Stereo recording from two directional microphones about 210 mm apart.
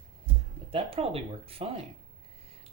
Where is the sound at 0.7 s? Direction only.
25° right (ahead or behind).